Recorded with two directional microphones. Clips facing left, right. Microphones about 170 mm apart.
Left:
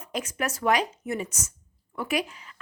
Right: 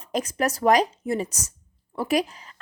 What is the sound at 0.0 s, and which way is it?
Speech, 40° right (ahead or behind).